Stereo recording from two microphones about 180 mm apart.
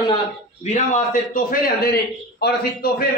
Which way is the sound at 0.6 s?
45° left (ahead or behind).